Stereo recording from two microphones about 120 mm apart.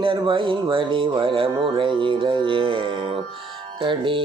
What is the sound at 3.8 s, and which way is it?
Speech, 45° right (ahead or behind).